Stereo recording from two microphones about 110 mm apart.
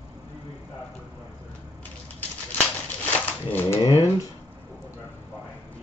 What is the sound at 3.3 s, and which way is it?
Cat, 15° left (ahead or behind).